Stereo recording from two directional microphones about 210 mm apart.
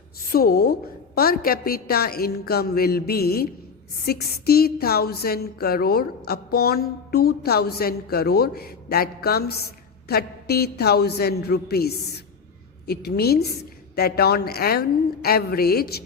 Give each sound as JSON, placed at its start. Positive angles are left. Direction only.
{"t": 0.3, "sound": "speech", "side_deg": 45}